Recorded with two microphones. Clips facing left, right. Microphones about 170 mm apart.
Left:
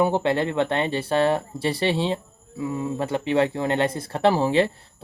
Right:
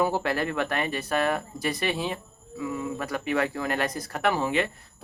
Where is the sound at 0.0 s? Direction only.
25° left (ahead or behind).